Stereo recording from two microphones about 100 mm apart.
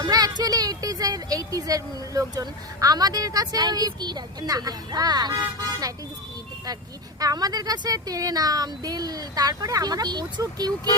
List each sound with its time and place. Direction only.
0.0 s a woman's voice: 40° right (ahead or behind)
7.2 s speech: 40° right (ahead or behind)